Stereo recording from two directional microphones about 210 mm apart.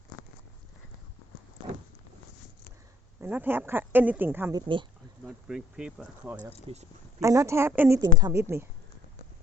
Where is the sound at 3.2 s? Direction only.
10° right (ahead or behind).